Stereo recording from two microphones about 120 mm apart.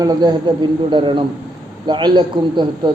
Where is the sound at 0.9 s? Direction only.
45° right (ahead or behind).